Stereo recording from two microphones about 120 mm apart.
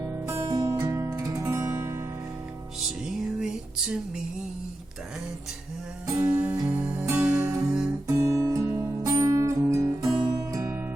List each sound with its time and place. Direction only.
0.0 s music: 25° right (ahead or behind)
3.0 s music: 5° right (ahead or behind)
6.1 s music: 25° right (ahead or behind)
6.3 s music: 15° right (ahead or behind)
8.0 s music: 25° right (ahead or behind)